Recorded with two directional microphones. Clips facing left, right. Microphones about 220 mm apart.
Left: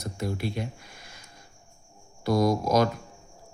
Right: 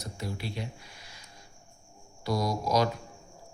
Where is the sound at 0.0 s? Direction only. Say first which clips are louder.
Left 6 dB; 50° left (ahead or behind).